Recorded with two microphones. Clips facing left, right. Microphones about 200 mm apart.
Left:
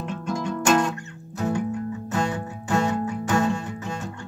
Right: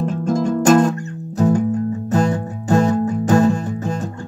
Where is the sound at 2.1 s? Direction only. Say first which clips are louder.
Right 8 dB; 40° right (ahead or behind).